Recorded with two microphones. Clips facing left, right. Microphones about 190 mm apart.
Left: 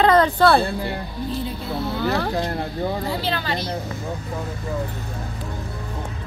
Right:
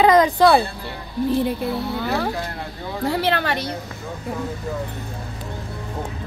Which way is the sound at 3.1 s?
70° right (ahead or behind).